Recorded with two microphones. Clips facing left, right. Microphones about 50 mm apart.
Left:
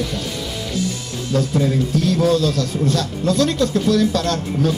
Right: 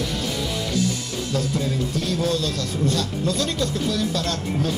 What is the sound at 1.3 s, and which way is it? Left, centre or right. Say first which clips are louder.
Speech: left 7 dB; centre.